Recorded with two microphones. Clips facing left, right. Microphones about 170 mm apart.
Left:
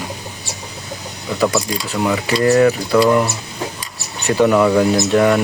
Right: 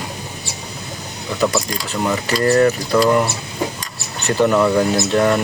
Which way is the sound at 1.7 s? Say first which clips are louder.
Left 2 dB; 10° left (ahead or behind).